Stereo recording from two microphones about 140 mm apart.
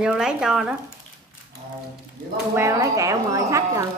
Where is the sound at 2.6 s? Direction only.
25° right (ahead or behind).